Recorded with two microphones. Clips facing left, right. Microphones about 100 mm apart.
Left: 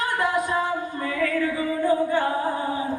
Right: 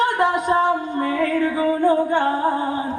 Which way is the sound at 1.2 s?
35° right (ahead or behind).